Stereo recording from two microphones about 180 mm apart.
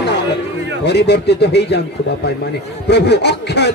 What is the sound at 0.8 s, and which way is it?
Speech, 70° left (ahead or behind).